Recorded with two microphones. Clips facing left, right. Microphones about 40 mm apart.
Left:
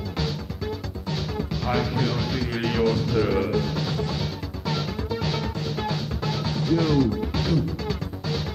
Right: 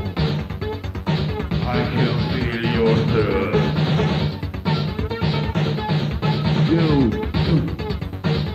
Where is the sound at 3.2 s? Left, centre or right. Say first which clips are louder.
Right 3 dB; right.